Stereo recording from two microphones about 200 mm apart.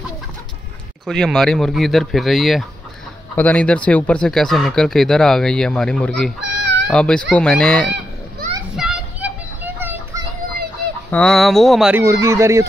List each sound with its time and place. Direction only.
1.0 s speech: 5° left (ahead or behind)
6.4 s a sound: 60° right (ahead or behind)
6.9 s speech: 5° left (ahead or behind)
8.7 s children playing: 5° right (ahead or behind)
11.1 s speech: 5° left (ahead or behind)
12.0 s speech: 15° right (ahead or behind)